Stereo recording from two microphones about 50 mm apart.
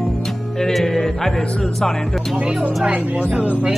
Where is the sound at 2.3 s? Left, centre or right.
Right.